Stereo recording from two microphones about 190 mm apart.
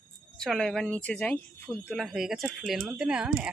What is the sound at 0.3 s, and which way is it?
Speech, 5° left (ahead or behind).